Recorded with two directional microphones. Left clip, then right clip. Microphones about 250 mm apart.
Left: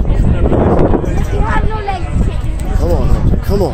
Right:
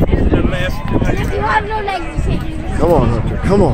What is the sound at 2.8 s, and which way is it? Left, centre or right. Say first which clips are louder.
Speech: right 6 dB; right.